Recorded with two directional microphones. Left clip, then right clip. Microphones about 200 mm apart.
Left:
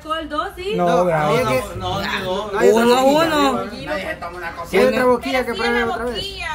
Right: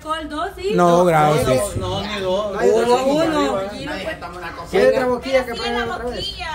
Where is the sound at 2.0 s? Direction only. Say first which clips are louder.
Right 2 dB; 55° left (ahead or behind).